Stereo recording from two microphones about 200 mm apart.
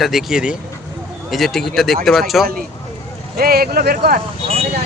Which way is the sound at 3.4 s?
50° right (ahead or behind).